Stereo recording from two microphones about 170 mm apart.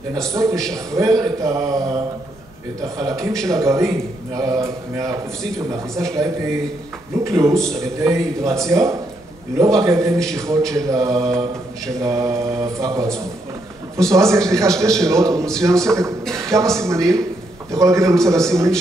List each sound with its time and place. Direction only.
0.3 s a man's voice: 15° right (ahead or behind)
3.0 s a man's voice: 20° right (ahead or behind)
7.5 s a man's voice: 5° left (ahead or behind)
7.8 s a man's voice: 15° right (ahead or behind)